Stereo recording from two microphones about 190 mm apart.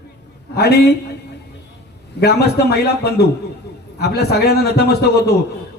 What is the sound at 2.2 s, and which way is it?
A man's voice, 60° left (ahead or behind).